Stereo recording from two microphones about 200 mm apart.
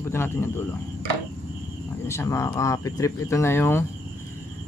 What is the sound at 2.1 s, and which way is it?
Speech, 15° left (ahead or behind).